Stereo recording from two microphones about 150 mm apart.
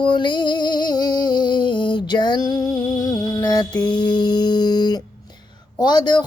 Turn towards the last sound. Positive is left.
turn(degrees=30)  # may be behind; listen again after turning